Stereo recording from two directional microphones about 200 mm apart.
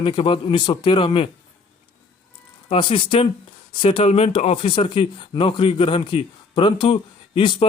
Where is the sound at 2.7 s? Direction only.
25° left (ahead or behind).